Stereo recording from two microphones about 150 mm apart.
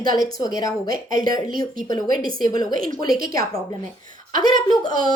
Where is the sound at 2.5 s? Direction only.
25° left (ahead or behind).